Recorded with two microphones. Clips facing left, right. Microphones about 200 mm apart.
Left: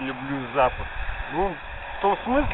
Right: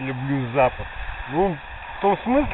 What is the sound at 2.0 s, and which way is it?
Speech, 10° right (ahead or behind).